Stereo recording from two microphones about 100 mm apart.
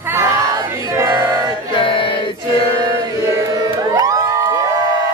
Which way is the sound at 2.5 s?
60° left (ahead or behind).